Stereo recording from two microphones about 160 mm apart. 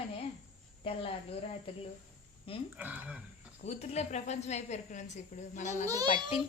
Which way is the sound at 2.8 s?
10° right (ahead or behind).